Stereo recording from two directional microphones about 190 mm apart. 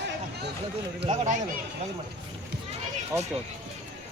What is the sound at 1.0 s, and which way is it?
Speech, 40° right (ahead or behind).